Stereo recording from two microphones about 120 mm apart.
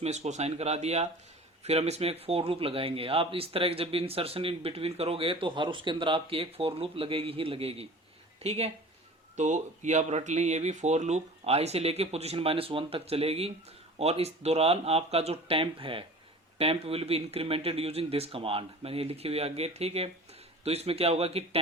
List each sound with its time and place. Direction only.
0.0 s speech: 70° right (ahead or behind)
9.3 s speech: 80° right; by 21.6 s 55° right (ahead or behind)